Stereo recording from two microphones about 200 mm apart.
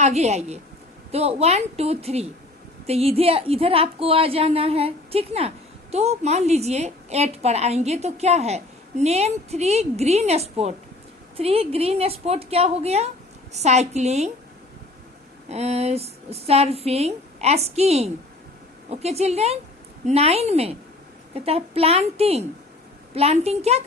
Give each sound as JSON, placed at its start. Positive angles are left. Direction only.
{"t": 0.0, "sound": "a woman's voice", "side_deg": -35}
{"t": 15.4, "sound": "a woman's voice", "side_deg": -35}